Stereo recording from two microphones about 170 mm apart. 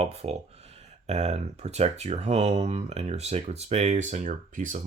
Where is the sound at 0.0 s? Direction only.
40° right (ahead or behind).